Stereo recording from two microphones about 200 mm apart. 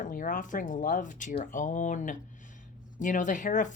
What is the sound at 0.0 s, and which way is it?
Speech, 40° left (ahead or behind).